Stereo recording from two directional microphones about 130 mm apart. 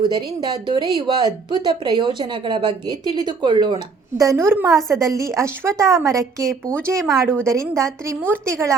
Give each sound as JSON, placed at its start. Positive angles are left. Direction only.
{"t": 0.1, "sound": "speech", "side_deg": -35}
{"t": 4.2, "sound": "a woman's voice", "side_deg": -20}